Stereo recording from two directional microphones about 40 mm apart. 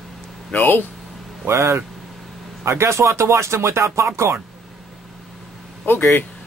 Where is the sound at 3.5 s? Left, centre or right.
Right.